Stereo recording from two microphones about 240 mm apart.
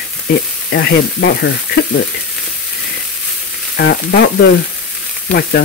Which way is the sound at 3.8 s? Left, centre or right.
Left.